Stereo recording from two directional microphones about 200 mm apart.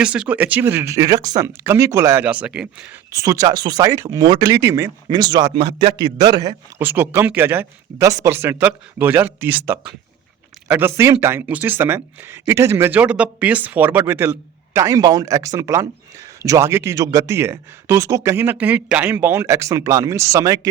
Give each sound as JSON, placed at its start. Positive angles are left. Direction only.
{"t": 0.0, "sound": "speech", "side_deg": -5}
{"t": 3.1, "sound": "speech", "side_deg": -15}